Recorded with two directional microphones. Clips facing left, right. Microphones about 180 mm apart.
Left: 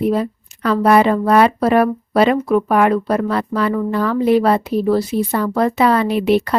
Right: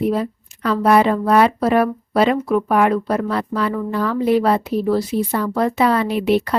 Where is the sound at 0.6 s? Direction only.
65° left (ahead or behind).